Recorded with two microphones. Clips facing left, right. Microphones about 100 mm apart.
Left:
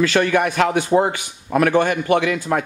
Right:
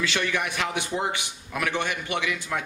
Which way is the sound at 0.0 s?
50° left (ahead or behind).